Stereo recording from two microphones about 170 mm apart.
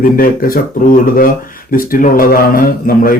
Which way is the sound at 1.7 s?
55° left (ahead or behind).